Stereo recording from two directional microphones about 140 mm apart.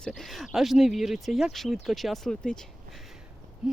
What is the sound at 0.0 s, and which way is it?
Speech, 5° left (ahead or behind).